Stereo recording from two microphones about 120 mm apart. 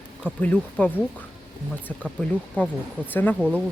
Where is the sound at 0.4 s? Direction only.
15° left (ahead or behind).